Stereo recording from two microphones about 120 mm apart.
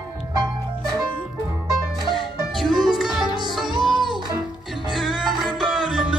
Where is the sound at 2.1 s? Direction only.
Centre (ahead or behind).